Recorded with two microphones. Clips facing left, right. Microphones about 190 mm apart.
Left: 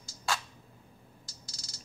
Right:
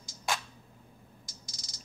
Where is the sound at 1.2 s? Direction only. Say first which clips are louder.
Right 1 dB; 30° left (ahead or behind).